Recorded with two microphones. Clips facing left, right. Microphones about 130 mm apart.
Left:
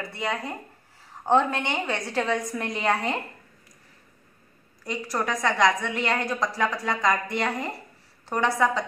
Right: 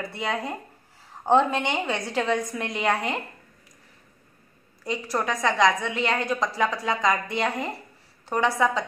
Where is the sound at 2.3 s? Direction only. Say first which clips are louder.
Right 1 dB; 20° right (ahead or behind).